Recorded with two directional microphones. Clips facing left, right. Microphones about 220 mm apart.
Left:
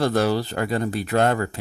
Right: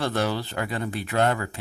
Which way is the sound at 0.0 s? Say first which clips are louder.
Left 5 dB; 40° left (ahead or behind).